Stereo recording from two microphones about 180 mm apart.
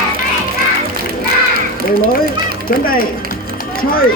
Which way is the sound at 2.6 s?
55° left (ahead or behind).